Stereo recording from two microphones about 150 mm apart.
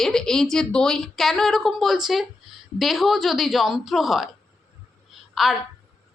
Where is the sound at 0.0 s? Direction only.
5° left (ahead or behind).